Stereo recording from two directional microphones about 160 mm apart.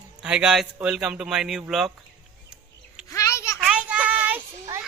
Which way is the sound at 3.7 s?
5° right (ahead or behind).